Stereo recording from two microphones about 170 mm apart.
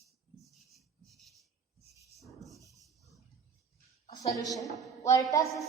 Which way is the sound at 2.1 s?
Centre (ahead or behind).